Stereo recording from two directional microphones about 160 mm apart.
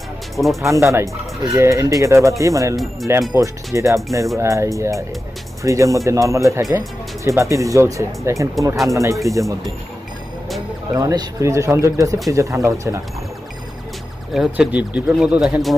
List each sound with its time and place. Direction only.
0.4 s speech: centre (ahead or behind)
0.7 s speech: 15° right (ahead or behind)
2.7 s speech: centre (ahead or behind)
3.3 s speech: 20° right (ahead or behind)
10.9 s speech: 20° right (ahead or behind)
14.3 s speech: 5° right (ahead or behind)